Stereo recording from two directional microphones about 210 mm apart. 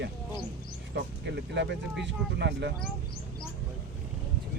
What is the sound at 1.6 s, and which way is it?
Speech, 60° right (ahead or behind).